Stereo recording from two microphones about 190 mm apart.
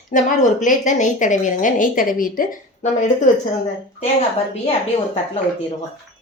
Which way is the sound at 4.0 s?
35° left (ahead or behind).